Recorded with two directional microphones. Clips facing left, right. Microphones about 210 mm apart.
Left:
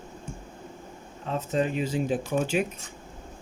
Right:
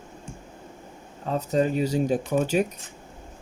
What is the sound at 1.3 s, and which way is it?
Speech, 40° right (ahead or behind).